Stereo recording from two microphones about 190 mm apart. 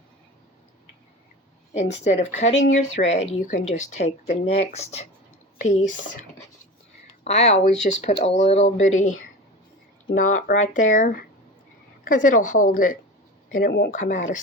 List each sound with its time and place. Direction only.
1.7 s speech: 35° left (ahead or behind)
7.3 s speech: 35° left (ahead or behind); by 14.0 s 55° left (ahead or behind)
14.0 s speech: 40° left (ahead or behind)